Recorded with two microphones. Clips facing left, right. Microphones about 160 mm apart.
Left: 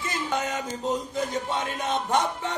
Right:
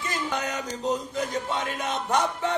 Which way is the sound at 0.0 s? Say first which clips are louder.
Left 1 dB; 25° left (ahead or behind).